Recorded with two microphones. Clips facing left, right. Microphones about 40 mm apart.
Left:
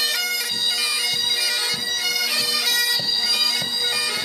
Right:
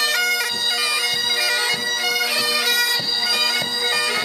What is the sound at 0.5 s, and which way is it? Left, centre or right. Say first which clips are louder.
Bagpipes: right 2 dB; centre.